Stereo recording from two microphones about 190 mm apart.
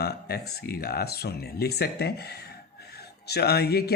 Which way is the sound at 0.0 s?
55° left (ahead or behind).